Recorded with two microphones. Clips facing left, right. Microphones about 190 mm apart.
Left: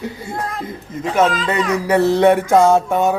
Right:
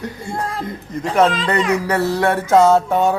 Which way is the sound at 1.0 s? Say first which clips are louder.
Right 1 dB; 5° left (ahead or behind).